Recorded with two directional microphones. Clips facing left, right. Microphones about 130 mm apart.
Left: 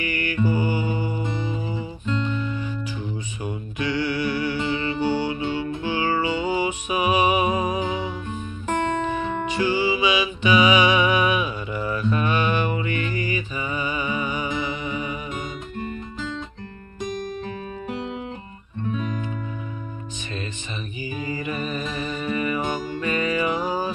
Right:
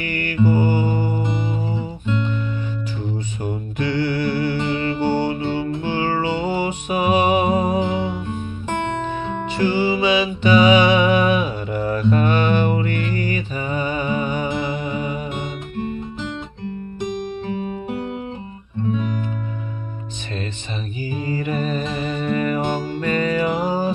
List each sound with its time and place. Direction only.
0.0 s music: 50° right (ahead or behind)
3.4 s music: 55° right (ahead or behind)
9.0 s music: 10° left (ahead or behind)
9.6 s music: 50° right (ahead or behind)
17.2 s music: 20° right (ahead or behind)
21.0 s mantra: 50° right (ahead or behind)
21.9 s music: 50° right (ahead or behind)
22.6 s music: 30° right (ahead or behind)
23.0 s music: 45° right (ahead or behind)